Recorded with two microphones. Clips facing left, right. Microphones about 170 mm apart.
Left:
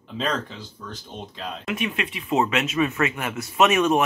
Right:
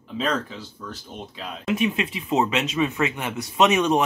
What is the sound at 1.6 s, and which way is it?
Speech, 25° right (ahead or behind).